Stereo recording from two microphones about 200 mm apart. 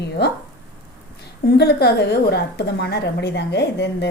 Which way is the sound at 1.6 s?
50° left (ahead or behind).